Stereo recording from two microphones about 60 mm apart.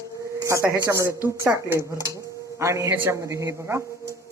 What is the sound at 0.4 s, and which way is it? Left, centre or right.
Speech, right.